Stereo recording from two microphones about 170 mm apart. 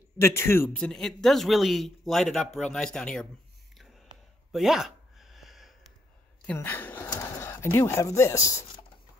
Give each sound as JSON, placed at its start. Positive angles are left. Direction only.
{"t": 0.2, "sound": "a man's voice", "side_deg": 15}
{"t": 4.5, "sound": "a sound", "side_deg": 0}
{"t": 6.4, "sound": "a woman's voice", "side_deg": 10}